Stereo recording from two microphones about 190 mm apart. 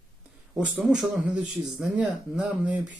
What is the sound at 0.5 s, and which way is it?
Speech, 5° right (ahead or behind).